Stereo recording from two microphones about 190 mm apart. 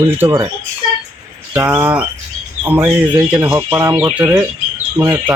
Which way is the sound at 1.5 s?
10° right (ahead or behind).